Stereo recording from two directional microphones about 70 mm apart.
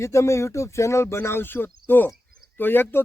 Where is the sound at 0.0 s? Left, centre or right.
Left.